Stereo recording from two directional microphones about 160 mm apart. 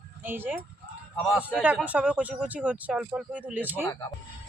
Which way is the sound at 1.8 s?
10° right (ahead or behind).